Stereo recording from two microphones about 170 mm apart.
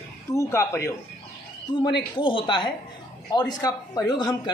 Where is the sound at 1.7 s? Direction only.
25° left (ahead or behind).